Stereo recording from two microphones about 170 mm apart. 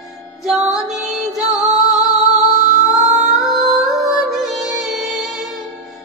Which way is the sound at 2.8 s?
Centre (ahead or behind).